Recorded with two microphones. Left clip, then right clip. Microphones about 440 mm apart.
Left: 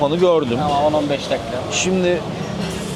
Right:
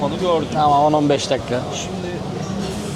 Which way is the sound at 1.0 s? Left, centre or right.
Right.